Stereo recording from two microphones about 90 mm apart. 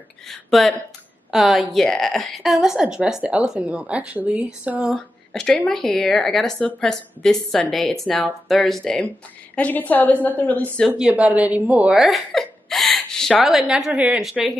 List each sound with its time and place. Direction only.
0.3 s a woman's voice: centre (ahead or behind); by 4.9 s 15° right (ahead or behind)
4.9 s a woman's voice: 5° left (ahead or behind)
11.0 s a woman's voice: 15° right (ahead or behind)
12.3 s a woman's voice: 5° left (ahead or behind)